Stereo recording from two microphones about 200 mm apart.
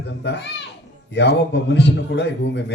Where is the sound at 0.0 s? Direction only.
60° left (ahead or behind).